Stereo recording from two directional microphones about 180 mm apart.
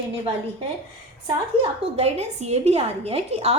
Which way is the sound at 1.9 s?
35° right (ahead or behind).